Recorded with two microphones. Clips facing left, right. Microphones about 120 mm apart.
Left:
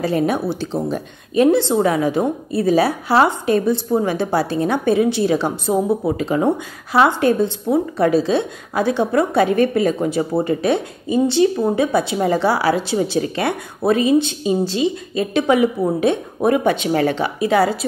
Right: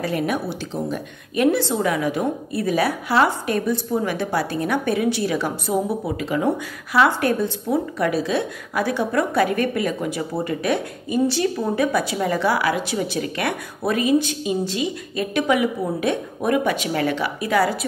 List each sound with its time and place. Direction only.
0.0 s a woman's voice: 30° left (ahead or behind)